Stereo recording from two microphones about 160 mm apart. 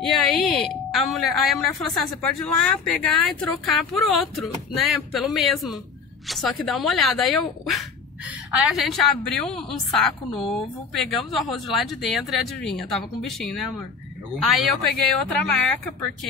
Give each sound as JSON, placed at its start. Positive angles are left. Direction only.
{"t": 0.0, "sound": "a woman's voice", "side_deg": 0}